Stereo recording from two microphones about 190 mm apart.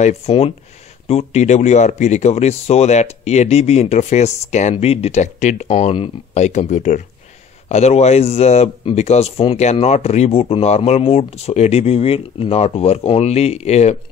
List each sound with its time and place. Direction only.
0.0 s a man's voice: 35° left (ahead or behind)